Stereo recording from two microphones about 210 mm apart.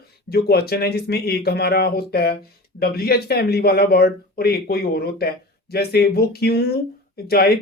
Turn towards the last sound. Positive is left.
turn(degrees=50)  # may be behind; listen again after turning